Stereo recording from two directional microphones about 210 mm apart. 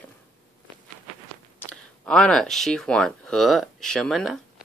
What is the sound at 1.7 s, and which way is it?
Speech, 5° left (ahead or behind).